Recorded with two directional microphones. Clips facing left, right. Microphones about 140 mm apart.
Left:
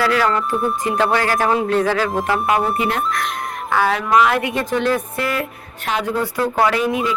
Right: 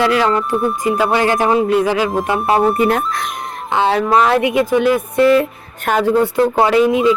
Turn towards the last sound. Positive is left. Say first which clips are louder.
# right 7 dB
turn(degrees=-20)  # may be behind; listen again after turning